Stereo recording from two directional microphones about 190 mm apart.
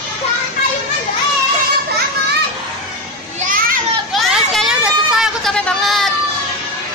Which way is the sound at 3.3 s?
45° right (ahead or behind).